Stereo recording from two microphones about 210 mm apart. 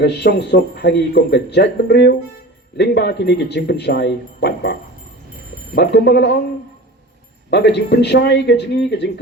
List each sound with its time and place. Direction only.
0.0 s speech: 55° left (ahead or behind)
7.5 s speech: 55° left (ahead or behind)